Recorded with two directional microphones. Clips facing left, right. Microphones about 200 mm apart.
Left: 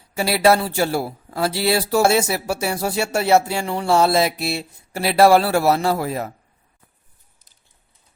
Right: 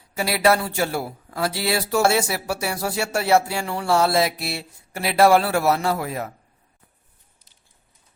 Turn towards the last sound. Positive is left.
turn(degrees=30)  # may be behind; listen again after turning